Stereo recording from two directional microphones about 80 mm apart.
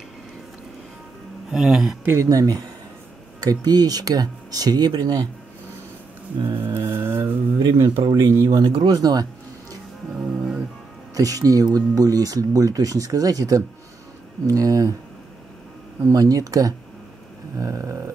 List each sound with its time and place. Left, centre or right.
1.5 s speech: centre
2.1 s speech: right
6.6 s music: right
7.7 s speech: right
8.9 s music: right
10.1 s music: centre
11.1 s speech: right
16.0 s speech: right